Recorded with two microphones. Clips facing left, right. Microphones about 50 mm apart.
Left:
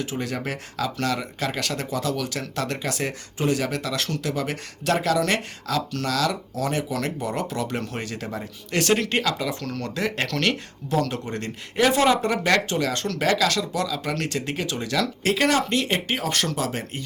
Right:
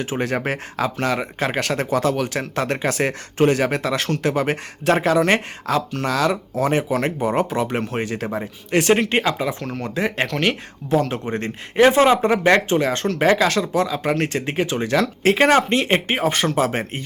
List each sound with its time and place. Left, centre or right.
0.0 s speech: right
3.6 s speech: right